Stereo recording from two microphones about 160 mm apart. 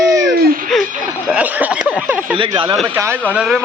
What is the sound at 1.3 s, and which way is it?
Speech, 10° right (ahead or behind).